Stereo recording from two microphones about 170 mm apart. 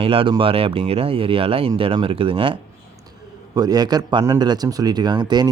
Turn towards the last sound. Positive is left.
turn(degrees=-25)  # may be behind; listen again after turning